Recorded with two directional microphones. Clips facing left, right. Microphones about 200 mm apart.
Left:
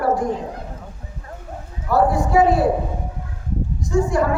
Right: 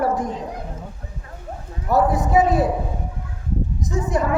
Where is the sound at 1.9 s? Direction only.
20° right (ahead or behind).